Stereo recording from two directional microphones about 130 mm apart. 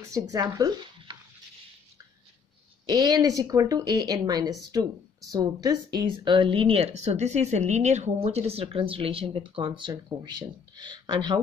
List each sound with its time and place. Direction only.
0.0 s speech: 25° right (ahead or behind)
2.9 s a woman's voice: 30° right (ahead or behind)